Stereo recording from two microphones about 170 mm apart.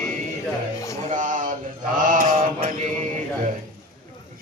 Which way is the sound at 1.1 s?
50° right (ahead or behind).